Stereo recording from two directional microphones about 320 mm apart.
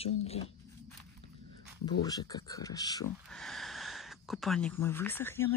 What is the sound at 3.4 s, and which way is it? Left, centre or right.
Speech, centre.